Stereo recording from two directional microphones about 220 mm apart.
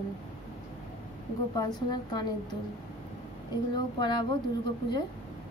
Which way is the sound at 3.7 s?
20° left (ahead or behind).